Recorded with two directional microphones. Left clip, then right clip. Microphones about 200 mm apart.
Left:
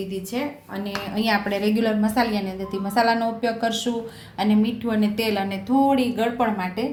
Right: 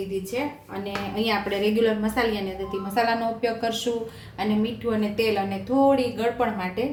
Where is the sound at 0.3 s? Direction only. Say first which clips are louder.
Even; 45° left (ahead or behind).